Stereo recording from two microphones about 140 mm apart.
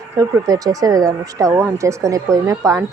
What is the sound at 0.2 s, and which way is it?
Speech, 25° right (ahead or behind).